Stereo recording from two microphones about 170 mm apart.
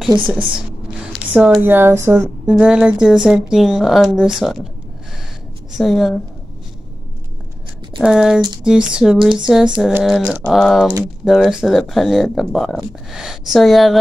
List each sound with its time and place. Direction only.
0.3 s speech: 5° right (ahead or behind)
5.7 s speech: centre (ahead or behind)
8.0 s speech: 5° right (ahead or behind)